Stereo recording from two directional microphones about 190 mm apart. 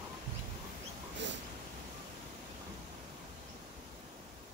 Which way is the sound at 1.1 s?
70° right (ahead or behind).